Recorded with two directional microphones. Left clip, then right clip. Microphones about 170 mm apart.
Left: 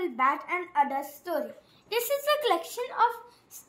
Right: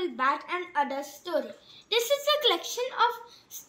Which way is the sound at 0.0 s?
35° left (ahead or behind).